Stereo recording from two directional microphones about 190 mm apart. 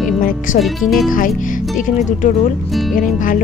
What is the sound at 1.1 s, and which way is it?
Speech, 45° left (ahead or behind).